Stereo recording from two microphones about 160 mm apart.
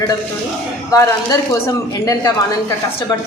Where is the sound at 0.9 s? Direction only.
20° left (ahead or behind).